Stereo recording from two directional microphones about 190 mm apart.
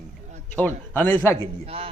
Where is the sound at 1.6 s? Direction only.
30° right (ahead or behind).